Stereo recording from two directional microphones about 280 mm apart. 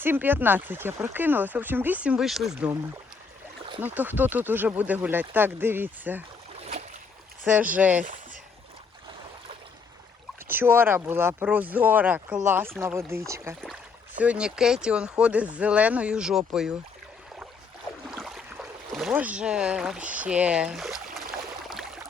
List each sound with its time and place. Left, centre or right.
0.0 s speech: centre
3.8 s speech: centre
7.4 s speech: centre
10.5 s speech: centre
18.1 s boat: centre